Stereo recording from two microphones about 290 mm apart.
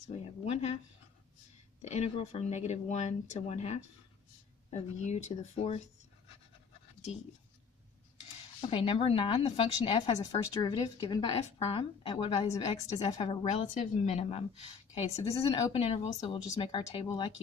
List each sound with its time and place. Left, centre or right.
0.1 s a woman's voice: left
1.8 s a woman's voice: left
8.6 s a woman's voice: centre